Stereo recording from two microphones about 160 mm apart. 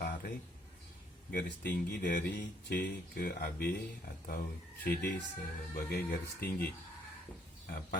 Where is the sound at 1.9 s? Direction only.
60° left (ahead or behind).